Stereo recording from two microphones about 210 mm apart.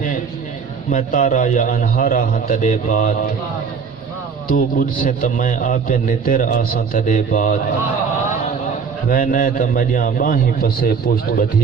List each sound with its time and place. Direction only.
0.9 s a man's voice: 40° left (ahead or behind)
4.4 s a man's voice: 40° left (ahead or behind)
9.0 s a man's voice: 40° left (ahead or behind)